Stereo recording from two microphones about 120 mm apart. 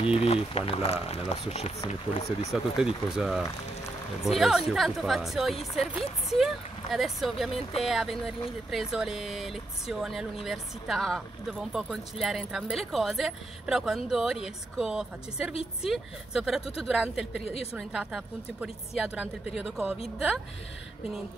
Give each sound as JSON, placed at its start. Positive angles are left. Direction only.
{"t": 0.0, "sound": "speech", "side_deg": 50}
{"t": 2.5, "sound": "a woman's voice", "side_deg": -5}